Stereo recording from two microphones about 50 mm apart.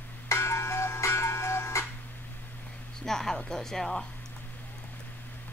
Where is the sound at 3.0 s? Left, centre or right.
Centre.